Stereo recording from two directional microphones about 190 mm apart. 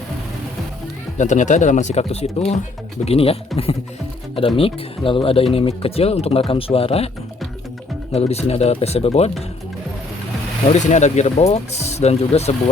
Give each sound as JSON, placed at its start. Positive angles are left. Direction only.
{"t": 1.2, "sound": "speech", "side_deg": 40}
{"t": 4.4, "sound": "speech", "side_deg": 30}
{"t": 8.1, "sound": "speech", "side_deg": 35}
{"t": 10.7, "sound": "speech", "side_deg": 40}